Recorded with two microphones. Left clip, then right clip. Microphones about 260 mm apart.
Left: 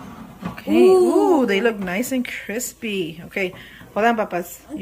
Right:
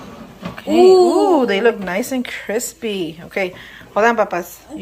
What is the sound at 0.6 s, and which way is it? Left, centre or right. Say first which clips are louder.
A woman's voice: right 4 dB; centre.